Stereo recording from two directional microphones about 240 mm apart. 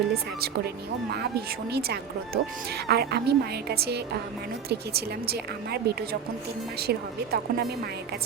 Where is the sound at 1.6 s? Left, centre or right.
Right.